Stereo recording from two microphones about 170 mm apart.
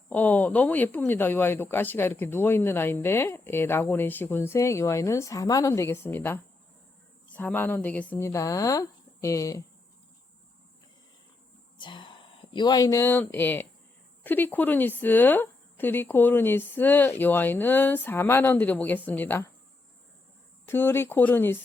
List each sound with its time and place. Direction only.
0.1 s speech: 10° left (ahead or behind)
11.8 s speech: 30° left (ahead or behind); by 19.5 s 10° left (ahead or behind)
20.7 s speech: 15° left (ahead or behind)